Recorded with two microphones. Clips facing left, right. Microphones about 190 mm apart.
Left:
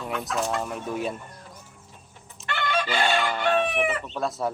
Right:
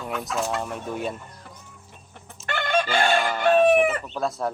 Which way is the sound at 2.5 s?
50° right (ahead or behind).